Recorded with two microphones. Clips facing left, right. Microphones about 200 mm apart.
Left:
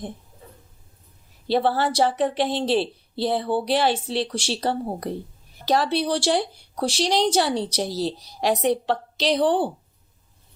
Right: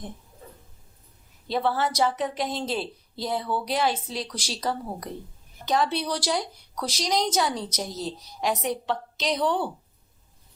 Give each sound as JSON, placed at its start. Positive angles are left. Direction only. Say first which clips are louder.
{"t": 1.5, "sound": "a woman's voice", "louder": "left 4 dB", "side_deg": 30}